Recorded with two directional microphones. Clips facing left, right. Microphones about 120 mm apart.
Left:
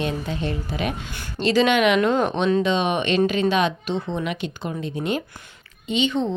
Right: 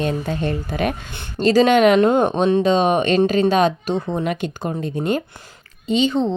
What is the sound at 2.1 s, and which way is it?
Speech, 30° right (ahead or behind).